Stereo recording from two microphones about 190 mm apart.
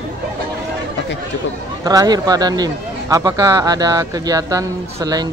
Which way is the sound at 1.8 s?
20° right (ahead or behind).